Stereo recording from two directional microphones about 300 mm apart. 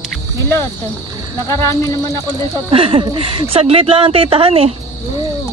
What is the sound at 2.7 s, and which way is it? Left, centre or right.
Speech, centre.